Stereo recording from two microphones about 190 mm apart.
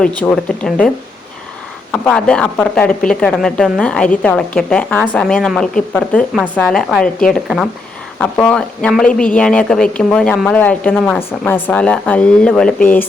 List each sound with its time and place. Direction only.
0.0 s a woman's voice: 5° left (ahead or behind)
1.9 s a woman's voice: 5° left (ahead or behind)